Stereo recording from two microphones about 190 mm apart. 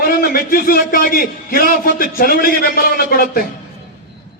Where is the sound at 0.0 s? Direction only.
50° left (ahead or behind).